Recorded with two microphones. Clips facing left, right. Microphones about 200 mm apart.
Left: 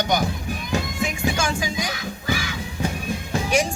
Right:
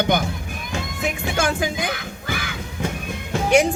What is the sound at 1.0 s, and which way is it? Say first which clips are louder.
Music: right 5 dB; 60° right (ahead or behind).